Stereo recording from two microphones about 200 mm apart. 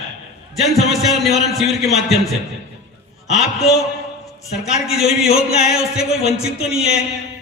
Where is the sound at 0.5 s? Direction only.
Centre (ahead or behind).